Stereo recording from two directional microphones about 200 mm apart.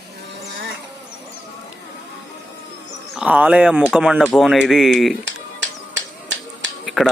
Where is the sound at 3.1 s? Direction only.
5° right (ahead or behind).